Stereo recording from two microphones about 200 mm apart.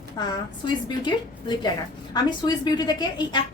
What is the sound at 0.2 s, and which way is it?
A woman's voice, 20° left (ahead or behind).